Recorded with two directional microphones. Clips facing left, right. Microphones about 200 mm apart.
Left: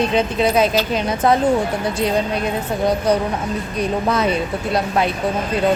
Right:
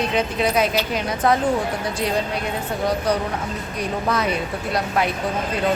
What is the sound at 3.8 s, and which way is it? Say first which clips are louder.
A woman's voice: left 4 dB; 25° left (ahead or behind).